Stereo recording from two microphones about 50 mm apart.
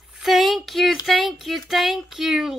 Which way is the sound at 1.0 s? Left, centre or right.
Centre.